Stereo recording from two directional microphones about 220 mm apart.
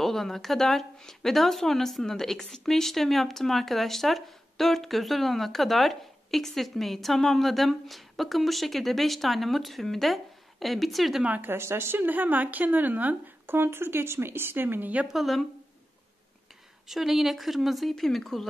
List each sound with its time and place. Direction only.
0.0 s speech: centre (ahead or behind)
16.8 s speech: centre (ahead or behind)